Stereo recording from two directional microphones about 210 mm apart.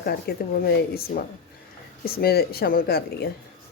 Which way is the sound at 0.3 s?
50° left (ahead or behind).